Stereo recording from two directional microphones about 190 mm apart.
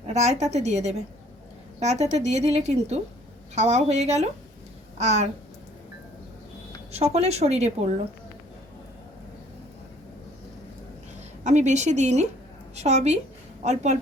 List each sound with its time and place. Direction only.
0.1 s a woman's voice: 35° right (ahead or behind)
6.9 s a woman's voice: 35° right (ahead or behind)
11.4 s a woman's voice: 35° right (ahead or behind)